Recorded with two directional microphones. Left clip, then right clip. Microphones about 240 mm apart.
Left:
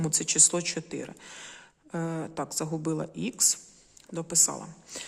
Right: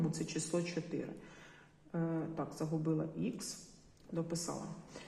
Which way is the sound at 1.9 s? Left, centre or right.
Left.